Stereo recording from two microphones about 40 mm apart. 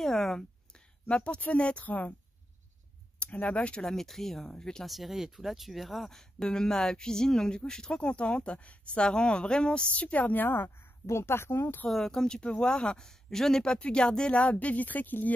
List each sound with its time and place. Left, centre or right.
0.0 s a sound: centre
1.0 s speech: left
1.9 s speech: left
3.2 s speech: left
3.8 s speech: centre
4.8 s speech: centre; by 9.8 s left
9.9 s speech: left
10.5 s speech: left
11.9 s speech: centre
12.4 s speech: left
13.7 s speech: left